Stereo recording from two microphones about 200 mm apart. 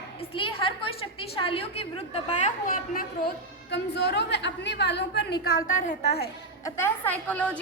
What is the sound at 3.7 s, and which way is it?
A woman's voice, 60° left (ahead or behind).